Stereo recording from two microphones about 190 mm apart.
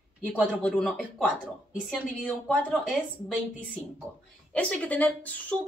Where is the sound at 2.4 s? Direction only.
5° left (ahead or behind).